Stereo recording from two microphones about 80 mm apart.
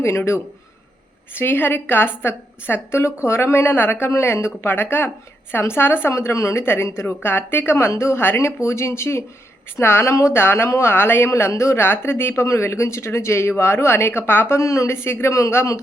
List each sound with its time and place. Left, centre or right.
0.0 s a woman's voice: left
10.2 s a woman's voice: left
10.4 s a woman's voice: left
14.5 s a woman's voice: left